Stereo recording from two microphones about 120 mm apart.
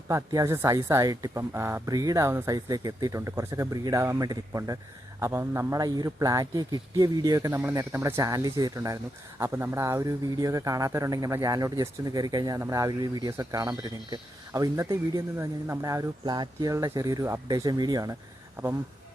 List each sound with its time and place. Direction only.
0.1 s a man's voice: 30° right (ahead or behind)